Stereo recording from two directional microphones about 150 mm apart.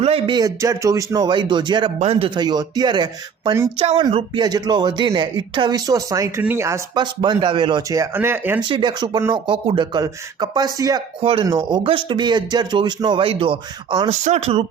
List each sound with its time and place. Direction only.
0.0 s speech: 40° right (ahead or behind)
0.3 s speech: 20° right (ahead or behind)
2.0 s speech: 40° right (ahead or behind); by 3.7 s 25° right (ahead or behind)
3.8 s speech: 35° right (ahead or behind); by 7.0 s 20° right (ahead or behind)
7.0 s speech: 30° right (ahead or behind); by 8.6 s 15° right (ahead or behind)
8.6 s speech: 30° right (ahead or behind)
11.2 s speech: 35° right (ahead or behind)
14.1 s speech: 45° right (ahead or behind)